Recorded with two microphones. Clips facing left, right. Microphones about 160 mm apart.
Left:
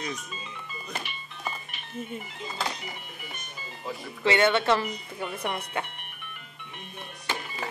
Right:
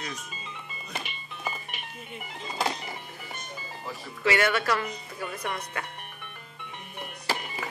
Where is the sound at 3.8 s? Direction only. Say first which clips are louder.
Left 2 dB; 25° left (ahead or behind).